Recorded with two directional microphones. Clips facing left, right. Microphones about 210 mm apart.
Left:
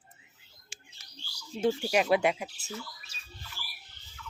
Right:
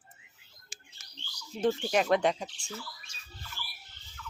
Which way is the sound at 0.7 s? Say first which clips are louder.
Even; 40° right (ahead or behind).